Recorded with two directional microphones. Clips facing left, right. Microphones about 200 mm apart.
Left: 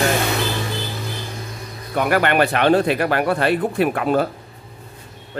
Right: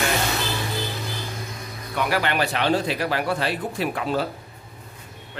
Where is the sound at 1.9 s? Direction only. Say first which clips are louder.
Left 6 dB; 50° left (ahead or behind).